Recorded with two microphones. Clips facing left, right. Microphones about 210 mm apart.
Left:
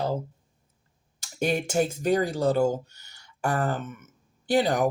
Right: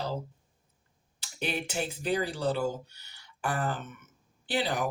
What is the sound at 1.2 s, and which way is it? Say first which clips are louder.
Speech: left 7 dB; 45° left (ahead or behind).